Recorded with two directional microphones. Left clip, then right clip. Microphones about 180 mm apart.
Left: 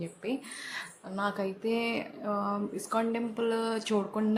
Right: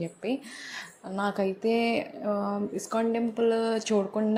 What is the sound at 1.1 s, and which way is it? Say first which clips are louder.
Speech: right 4 dB; 20° right (ahead or behind).